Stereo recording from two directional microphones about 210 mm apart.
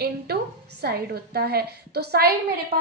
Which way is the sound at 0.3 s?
50° right (ahead or behind).